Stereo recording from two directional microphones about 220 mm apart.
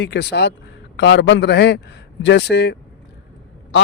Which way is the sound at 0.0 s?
50° left (ahead or behind).